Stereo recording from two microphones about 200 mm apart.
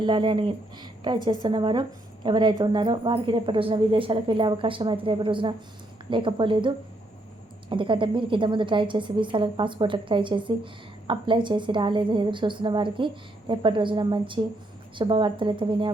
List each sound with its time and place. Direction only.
0.0 s a woman's voice: 25° right (ahead or behind)